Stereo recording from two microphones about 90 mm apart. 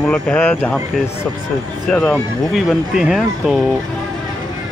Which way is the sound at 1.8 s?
10° left (ahead or behind).